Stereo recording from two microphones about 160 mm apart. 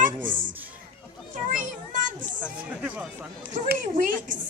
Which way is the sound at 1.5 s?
55° right (ahead or behind).